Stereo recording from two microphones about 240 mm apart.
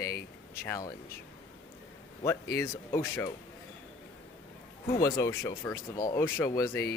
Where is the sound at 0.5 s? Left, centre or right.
Centre.